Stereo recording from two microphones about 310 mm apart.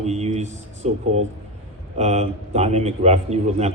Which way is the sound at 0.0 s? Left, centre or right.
Right.